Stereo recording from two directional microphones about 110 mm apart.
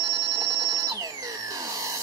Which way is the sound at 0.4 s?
35° right (ahead or behind).